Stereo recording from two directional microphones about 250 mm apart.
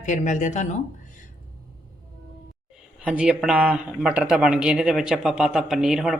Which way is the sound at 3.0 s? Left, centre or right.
Centre.